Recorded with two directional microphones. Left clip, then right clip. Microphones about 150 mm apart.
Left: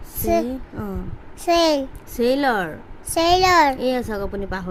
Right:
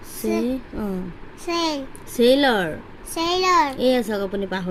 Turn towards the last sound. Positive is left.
turn(degrees=-15)  # may be behind; listen again after turning